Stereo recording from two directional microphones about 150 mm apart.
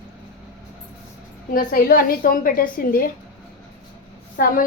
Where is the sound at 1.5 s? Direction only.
70° left (ahead or behind).